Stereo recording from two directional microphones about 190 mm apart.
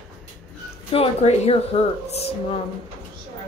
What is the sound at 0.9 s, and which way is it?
Speech, 30° left (ahead or behind).